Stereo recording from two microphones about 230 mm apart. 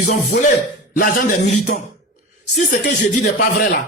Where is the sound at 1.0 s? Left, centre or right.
Left.